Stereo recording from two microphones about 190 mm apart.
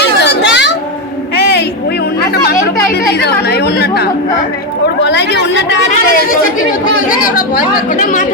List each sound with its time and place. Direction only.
0.0 s children playing: 65° left (ahead or behind)
1.4 s a sound: 60° left (ahead or behind)
2.3 s chatter: 55° left (ahead or behind)
4.9 s speech: 65° left (ahead or behind)
6.8 s speech: 45° left (ahead or behind)